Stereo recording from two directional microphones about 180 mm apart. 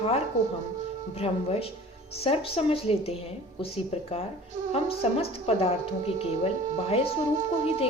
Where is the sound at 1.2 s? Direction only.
35° left (ahead or behind).